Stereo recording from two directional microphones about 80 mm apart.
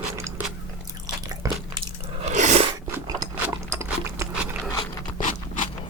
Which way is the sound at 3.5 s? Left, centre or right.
Right.